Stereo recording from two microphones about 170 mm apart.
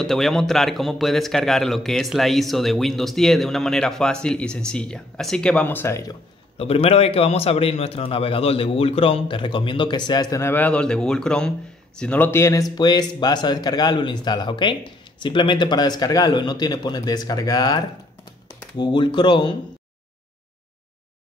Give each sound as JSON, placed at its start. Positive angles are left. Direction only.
{"t": 0.0, "sound": "a man's voice", "side_deg": 0}
{"t": 6.6, "sound": "a man's voice", "side_deg": 35}